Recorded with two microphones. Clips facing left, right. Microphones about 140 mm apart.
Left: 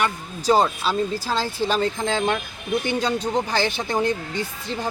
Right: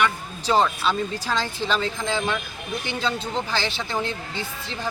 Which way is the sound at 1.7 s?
50° left (ahead or behind).